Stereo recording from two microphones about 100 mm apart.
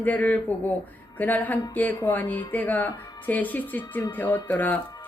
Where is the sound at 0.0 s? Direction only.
15° left (ahead or behind).